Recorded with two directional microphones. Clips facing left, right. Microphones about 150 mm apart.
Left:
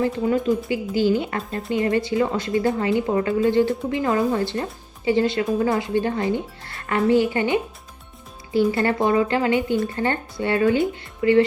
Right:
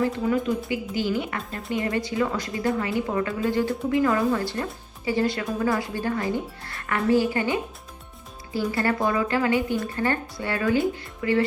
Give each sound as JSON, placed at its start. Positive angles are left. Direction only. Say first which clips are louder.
{"t": 0.2, "sound": "a woman's voice", "louder": "left 3 dB", "side_deg": 20}